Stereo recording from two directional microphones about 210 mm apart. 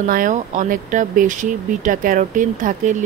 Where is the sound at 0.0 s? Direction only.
40° right (ahead or behind).